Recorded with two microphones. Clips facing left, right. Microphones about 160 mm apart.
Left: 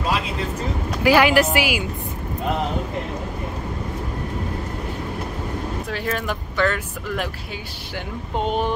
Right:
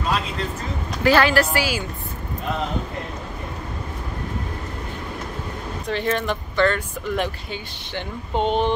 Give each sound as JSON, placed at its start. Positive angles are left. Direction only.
{"t": 1.0, "sound": "a woman's voice", "side_deg": 15}
{"t": 5.9, "sound": "a woman's voice", "side_deg": 5}